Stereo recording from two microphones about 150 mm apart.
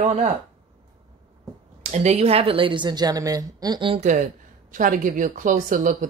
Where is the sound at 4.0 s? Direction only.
55° right (ahead or behind).